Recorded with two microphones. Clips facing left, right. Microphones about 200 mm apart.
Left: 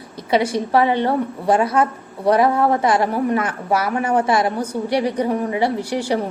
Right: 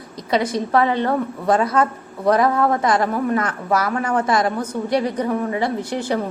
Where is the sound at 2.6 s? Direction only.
10° left (ahead or behind).